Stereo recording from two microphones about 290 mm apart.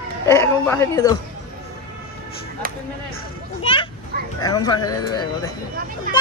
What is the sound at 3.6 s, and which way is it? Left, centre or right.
A child's voice, centre.